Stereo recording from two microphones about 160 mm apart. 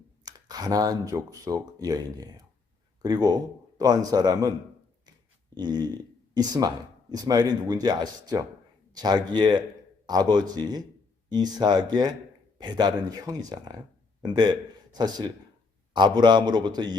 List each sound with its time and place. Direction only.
0.3 s speech: 25° right (ahead or behind)
5.5 s a man's voice: 25° right (ahead or behind)